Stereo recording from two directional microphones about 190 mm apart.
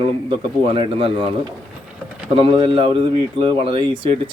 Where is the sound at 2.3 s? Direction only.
30° right (ahead or behind).